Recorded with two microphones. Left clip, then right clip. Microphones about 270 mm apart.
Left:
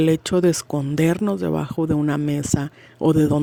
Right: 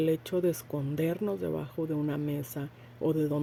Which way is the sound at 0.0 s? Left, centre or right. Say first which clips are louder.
Left 10 dB; left.